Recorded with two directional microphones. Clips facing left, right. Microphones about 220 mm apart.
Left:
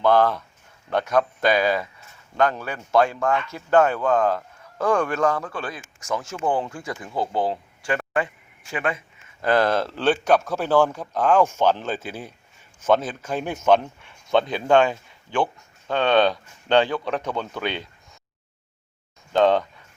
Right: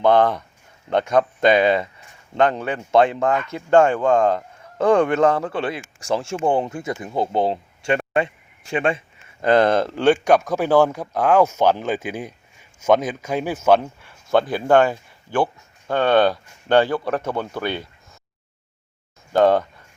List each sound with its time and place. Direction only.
0.0 s speech: 20° right (ahead or behind)
19.3 s speech: 10° right (ahead or behind)